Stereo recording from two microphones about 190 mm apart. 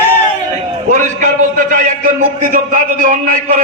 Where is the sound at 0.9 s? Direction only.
40° right (ahead or behind).